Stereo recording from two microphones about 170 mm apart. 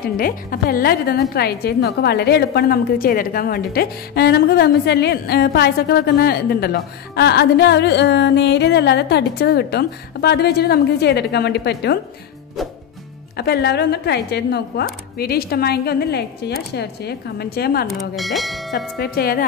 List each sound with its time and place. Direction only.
0.2 s a woman's voice: 60° left (ahead or behind); by 12.0 s 80° left
13.4 s a woman's voice: 75° left (ahead or behind)
17.8 s speech: centre (ahead or behind)
18.9 s a woman's voice: 65° left (ahead or behind)